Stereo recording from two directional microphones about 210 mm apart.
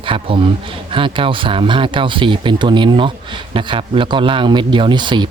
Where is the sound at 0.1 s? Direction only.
25° right (ahead or behind).